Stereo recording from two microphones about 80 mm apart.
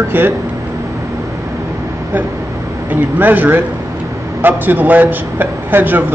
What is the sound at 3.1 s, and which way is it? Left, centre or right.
A man's voice, right.